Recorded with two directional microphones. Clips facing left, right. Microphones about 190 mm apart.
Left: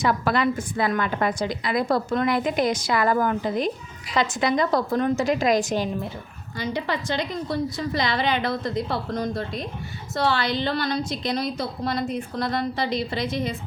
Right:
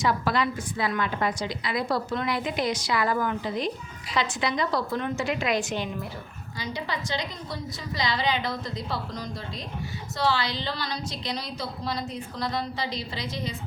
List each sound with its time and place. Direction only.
0.0 s a woman's voice: 55° left (ahead or behind)
6.6 s a woman's voice: 55° left (ahead or behind)